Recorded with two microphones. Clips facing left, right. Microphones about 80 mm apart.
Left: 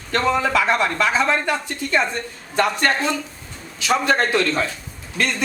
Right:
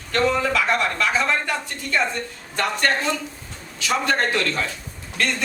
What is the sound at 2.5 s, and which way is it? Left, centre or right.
Speech, centre.